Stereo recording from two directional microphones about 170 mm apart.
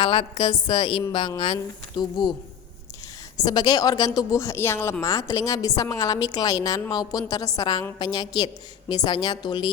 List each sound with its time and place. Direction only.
0.0 s a woman's voice: 30° left (ahead or behind)
3.4 s a woman's voice: 20° left (ahead or behind)